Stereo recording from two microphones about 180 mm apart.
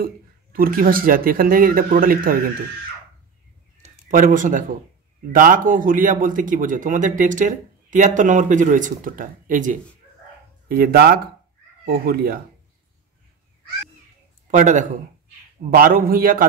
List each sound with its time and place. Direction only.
0.0 s a man's voice: 55° right (ahead or behind)
4.1 s a man's voice: 45° right (ahead or behind)
10.7 s speech: 55° right (ahead or behind)
14.5 s a man's voice: 45° right (ahead or behind)